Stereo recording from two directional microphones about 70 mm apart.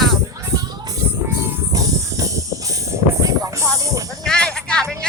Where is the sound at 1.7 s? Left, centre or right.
Right.